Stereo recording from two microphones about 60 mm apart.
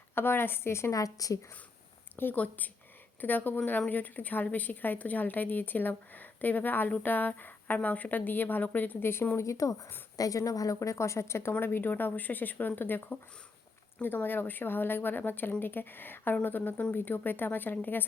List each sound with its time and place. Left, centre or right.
0.1 s speech: left
0.9 s speech: left
2.1 s a woman's voice: left
9.3 s a woman's voice: left
11.6 s speech: left